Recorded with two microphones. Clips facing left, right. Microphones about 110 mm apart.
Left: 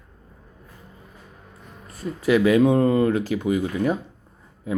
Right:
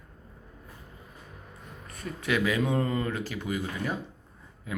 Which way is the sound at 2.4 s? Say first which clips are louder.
Left 12 dB; 35° left (ahead or behind).